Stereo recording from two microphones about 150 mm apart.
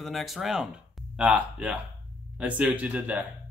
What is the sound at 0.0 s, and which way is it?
Speech, centre (ahead or behind).